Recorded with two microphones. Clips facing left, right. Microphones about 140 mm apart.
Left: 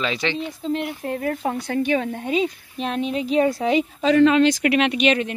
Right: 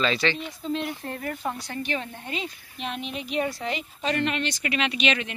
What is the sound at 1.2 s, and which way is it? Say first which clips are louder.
Speech: left 7 dB; 55° left (ahead or behind).